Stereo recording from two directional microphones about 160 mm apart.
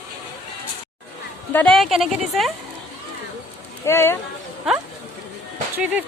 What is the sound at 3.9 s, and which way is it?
Speech, 15° left (ahead or behind).